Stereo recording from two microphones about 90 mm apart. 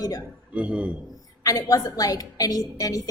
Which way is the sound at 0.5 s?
15° right (ahead or behind).